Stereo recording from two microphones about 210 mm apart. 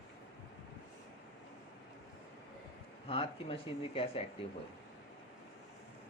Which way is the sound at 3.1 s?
25° left (ahead or behind).